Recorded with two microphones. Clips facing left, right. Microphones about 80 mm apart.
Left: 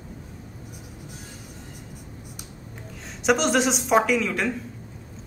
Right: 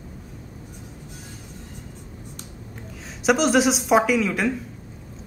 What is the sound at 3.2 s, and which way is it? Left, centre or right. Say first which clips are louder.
A woman's voice: right 2 dB; centre.